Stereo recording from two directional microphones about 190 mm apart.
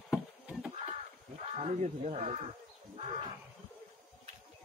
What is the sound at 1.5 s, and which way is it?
Speech, 35° right (ahead or behind).